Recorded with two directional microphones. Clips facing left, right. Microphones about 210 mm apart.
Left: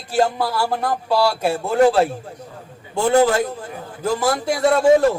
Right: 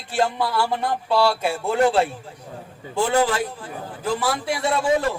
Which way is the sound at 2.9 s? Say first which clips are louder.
Left 5 dB; 45° left (ahead or behind).